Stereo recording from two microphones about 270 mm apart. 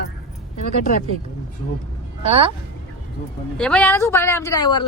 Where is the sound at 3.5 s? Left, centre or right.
Centre.